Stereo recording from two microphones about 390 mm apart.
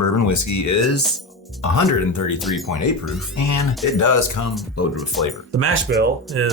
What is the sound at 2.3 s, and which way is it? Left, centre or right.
Speech, centre.